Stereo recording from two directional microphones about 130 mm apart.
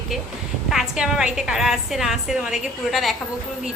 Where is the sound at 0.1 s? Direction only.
Centre (ahead or behind).